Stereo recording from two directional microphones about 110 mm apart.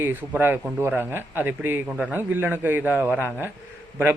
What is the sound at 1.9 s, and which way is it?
A man's voice, 10° right (ahead or behind).